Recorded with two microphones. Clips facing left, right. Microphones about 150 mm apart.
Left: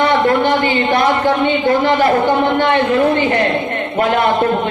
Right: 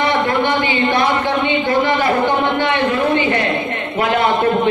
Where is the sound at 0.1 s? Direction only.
45° left (ahead or behind).